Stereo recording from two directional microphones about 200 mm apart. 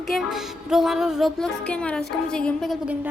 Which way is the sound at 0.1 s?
Centre (ahead or behind).